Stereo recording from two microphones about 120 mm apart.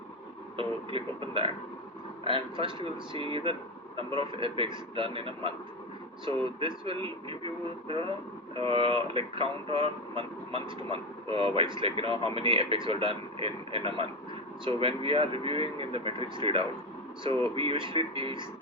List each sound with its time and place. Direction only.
0.5 s speech: 50° right (ahead or behind)